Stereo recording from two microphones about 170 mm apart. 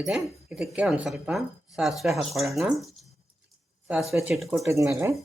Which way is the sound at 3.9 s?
Centre (ahead or behind).